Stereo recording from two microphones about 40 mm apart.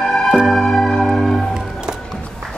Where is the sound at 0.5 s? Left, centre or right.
Centre.